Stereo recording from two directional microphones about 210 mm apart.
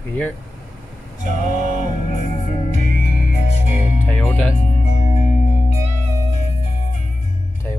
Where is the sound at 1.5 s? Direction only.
35° right (ahead or behind).